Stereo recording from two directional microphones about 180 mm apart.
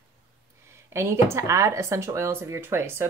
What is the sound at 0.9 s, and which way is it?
Speech, 15° right (ahead or behind).